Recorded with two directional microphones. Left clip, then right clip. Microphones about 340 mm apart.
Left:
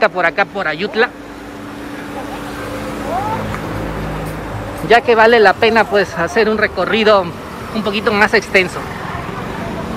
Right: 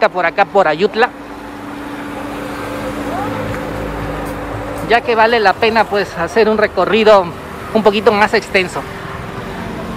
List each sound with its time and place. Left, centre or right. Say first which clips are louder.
0.0 s speech: right 1 dB; centre
4.8 s speech: left 2 dB; centre